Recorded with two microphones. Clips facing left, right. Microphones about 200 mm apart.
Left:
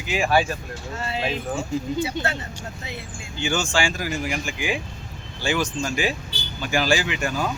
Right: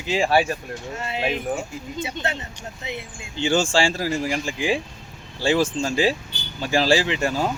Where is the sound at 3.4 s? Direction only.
30° right (ahead or behind).